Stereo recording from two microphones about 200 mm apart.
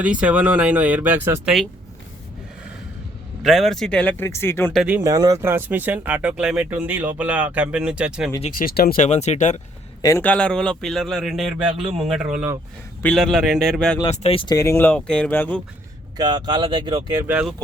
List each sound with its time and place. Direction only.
0.0 s speech: 5° right (ahead or behind)
3.4 s speech: centre (ahead or behind)
4.7 s a man's voice: centre (ahead or behind)
4.9 s speech: 15° right (ahead or behind)
8.5 s speech: 50° left (ahead or behind)
10.0 s a man's voice: 15° left (ahead or behind); by 12.5 s 5° right (ahead or behind)
13.0 s a man's voice: 5° left (ahead or behind)
14.0 s speech: 30° left (ahead or behind)
14.5 s speech: 15° left (ahead or behind)
16.1 s speech: 20° right (ahead or behind)
17.2 s speech: 5° right (ahead or behind)